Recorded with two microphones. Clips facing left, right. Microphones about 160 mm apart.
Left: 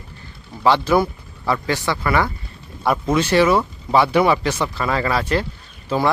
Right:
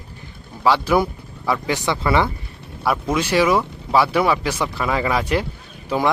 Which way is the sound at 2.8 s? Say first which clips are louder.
Left 2 dB; 5° right (ahead or behind).